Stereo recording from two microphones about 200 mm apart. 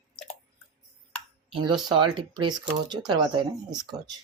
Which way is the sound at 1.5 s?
25° right (ahead or behind).